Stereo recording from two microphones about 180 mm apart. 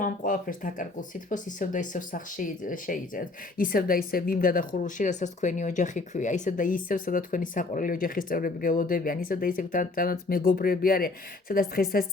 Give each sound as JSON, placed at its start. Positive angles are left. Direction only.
{"t": 0.0, "sound": "speech", "side_deg": 50}